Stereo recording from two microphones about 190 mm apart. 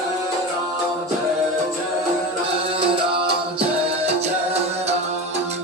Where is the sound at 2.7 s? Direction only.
30° right (ahead or behind).